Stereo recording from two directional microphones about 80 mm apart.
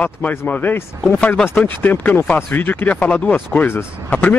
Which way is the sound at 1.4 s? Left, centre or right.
Left.